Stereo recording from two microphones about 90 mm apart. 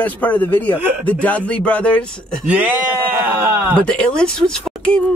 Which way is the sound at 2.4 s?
15° right (ahead or behind).